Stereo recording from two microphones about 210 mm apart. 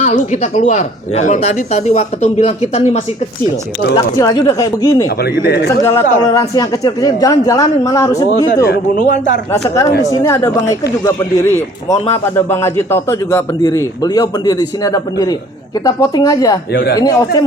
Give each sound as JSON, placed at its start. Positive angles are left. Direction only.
{"t": 0.0, "sound": "speech", "side_deg": 35}
{"t": 3.9, "sound": "a man's voice", "side_deg": 20}
{"t": 5.5, "sound": "a man's voice", "side_deg": 45}
{"t": 5.8, "sound": "a man's voice", "side_deg": 15}
{"t": 8.6, "sound": "speech", "side_deg": 45}
{"t": 9.5, "sound": "a man's voice", "side_deg": 15}
{"t": 16.7, "sound": "a man's voice", "side_deg": 50}
{"t": 17.0, "sound": "a man's voice", "side_deg": 15}